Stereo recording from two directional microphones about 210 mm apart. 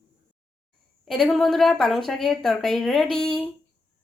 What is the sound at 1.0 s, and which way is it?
Speech, centre (ahead or behind).